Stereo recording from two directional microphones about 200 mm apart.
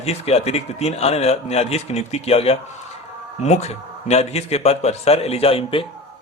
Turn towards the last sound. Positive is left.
turn(degrees=30)  # may be behind; listen again after turning